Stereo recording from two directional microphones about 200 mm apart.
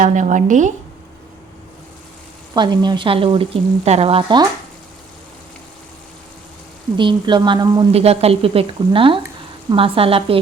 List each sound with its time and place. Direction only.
0.0 s a woman's voice: 40° right (ahead or behind)
2.6 s a woman's voice: 20° right (ahead or behind)
6.9 s a woman's voice: 25° right (ahead or behind)